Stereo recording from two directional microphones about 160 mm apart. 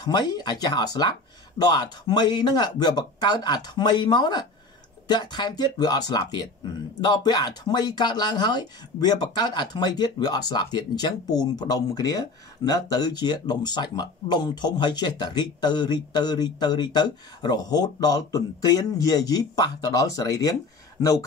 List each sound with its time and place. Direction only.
0.0 s speech: 25° left (ahead or behind)